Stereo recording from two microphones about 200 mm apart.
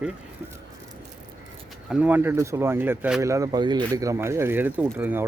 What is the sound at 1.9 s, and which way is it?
Speech, 10° right (ahead or behind).